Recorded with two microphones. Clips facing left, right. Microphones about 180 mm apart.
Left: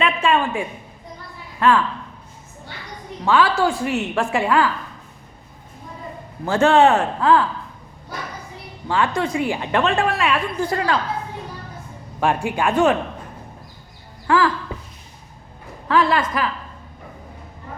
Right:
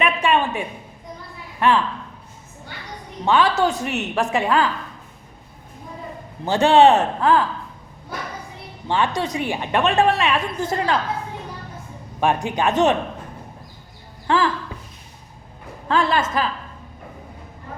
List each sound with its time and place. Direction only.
0.0 s a sound: 15° right (ahead or behind)
1.5 s a woman's voice: 20° right (ahead or behind)
3.2 s a woman's voice: 20° right (ahead or behind)
6.4 s a woman's voice: 20° right (ahead or behind)
8.9 s a woman's voice: 20° right (ahead or behind)
12.2 s a woman's voice: 20° right (ahead or behind)
14.3 s a woman's voice: 25° right (ahead or behind)
15.9 s a woman's voice: 25° right (ahead or behind)